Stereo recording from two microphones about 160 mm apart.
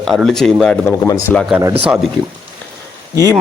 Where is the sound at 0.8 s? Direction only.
15° left (ahead or behind).